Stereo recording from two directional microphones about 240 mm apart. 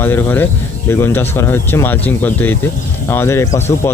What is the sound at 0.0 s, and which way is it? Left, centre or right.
Speech, centre.